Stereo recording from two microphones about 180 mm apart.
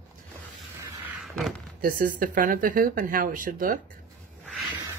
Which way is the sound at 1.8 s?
50° right (ahead or behind).